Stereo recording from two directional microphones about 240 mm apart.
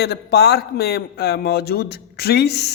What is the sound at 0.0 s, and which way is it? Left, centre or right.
A woman's voice, left.